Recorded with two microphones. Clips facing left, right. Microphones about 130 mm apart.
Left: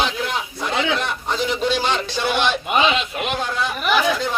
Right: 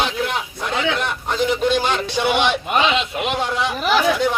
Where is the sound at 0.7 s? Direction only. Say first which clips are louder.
Even; 20° left (ahead or behind).